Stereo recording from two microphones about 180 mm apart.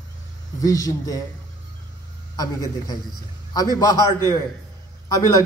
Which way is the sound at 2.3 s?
20° left (ahead or behind).